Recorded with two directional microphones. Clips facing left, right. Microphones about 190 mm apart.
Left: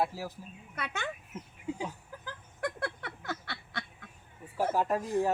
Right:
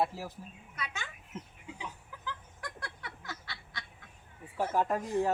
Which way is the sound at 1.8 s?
50° left (ahead or behind).